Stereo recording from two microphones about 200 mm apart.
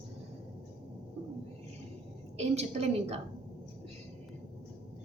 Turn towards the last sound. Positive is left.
turn(degrees=-30)  # may be behind; listen again after turning